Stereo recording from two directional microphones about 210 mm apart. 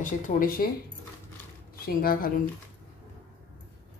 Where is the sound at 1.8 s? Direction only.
45° left (ahead or behind).